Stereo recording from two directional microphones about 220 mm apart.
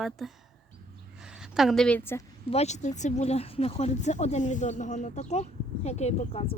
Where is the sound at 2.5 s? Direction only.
30° left (ahead or behind).